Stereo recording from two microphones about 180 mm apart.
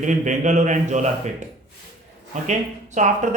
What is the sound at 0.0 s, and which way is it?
A man's voice, 40° right (ahead or behind).